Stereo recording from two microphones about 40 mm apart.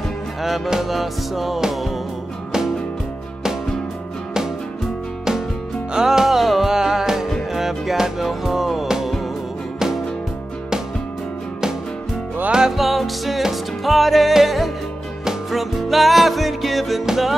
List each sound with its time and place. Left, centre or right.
0.7 s music: centre
5.9 s music: centre
12.4 s music: centre
12.7 s music: centre